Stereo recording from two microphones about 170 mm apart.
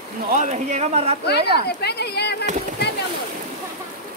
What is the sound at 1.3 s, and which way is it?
Speech, 75° left (ahead or behind).